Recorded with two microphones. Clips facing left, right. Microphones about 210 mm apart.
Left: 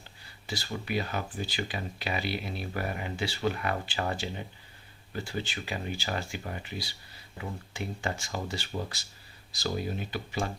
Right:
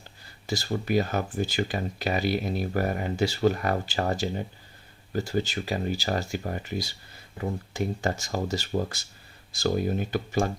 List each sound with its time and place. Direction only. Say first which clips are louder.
0.4 s speech: right 7 dB; 45° right (ahead or behind)